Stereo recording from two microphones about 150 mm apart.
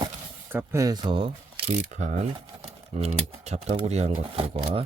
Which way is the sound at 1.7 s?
50° right (ahead or behind).